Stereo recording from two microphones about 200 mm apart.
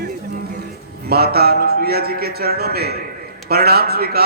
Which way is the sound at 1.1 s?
50° right (ahead or behind).